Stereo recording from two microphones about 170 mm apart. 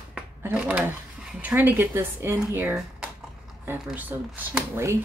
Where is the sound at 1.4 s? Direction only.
10° right (ahead or behind).